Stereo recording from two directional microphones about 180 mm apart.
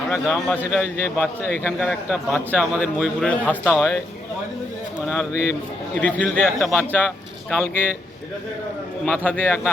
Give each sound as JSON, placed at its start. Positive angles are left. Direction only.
{"t": 0.1, "sound": "a man's voice", "side_deg": 5}
{"t": 5.3, "sound": "a man's voice", "side_deg": 15}
{"t": 9.0, "sound": "a man's voice", "side_deg": 5}